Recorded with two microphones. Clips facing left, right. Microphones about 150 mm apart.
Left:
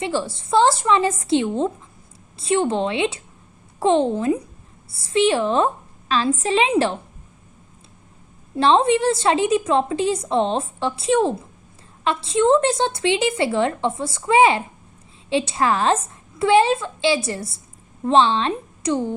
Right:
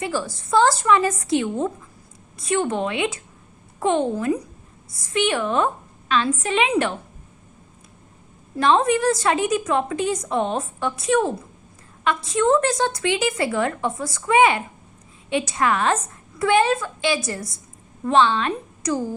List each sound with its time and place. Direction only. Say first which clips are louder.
0.0 s a woman's voice: left 2 dB; 25° left (ahead or behind)
8.5 s a woman's voice: left 2 dB; 30° left (ahead or behind)